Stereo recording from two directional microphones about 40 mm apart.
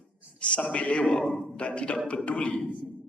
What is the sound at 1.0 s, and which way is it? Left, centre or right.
A man's voice, left.